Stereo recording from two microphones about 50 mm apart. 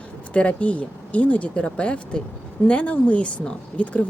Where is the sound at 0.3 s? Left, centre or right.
Left.